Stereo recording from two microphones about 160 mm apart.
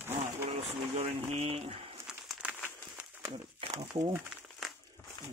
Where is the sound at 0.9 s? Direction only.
40° right (ahead or behind).